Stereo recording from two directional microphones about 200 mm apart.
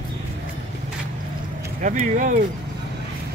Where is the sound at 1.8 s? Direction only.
40° right (ahead or behind).